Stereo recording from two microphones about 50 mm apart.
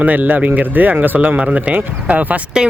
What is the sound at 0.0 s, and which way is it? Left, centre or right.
Speech, right.